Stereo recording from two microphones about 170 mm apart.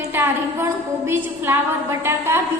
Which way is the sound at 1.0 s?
15° right (ahead or behind).